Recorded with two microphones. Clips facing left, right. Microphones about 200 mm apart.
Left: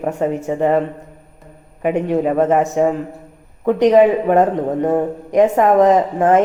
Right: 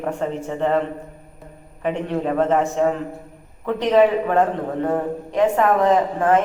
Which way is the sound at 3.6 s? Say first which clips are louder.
Left 5 dB; 20° left (ahead or behind).